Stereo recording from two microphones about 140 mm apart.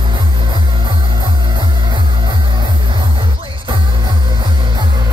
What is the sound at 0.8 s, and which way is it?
Music, 30° right (ahead or behind).